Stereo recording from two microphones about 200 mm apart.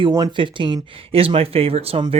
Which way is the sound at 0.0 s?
20° right (ahead or behind).